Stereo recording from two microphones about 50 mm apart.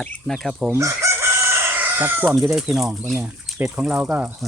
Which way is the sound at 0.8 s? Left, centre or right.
Right.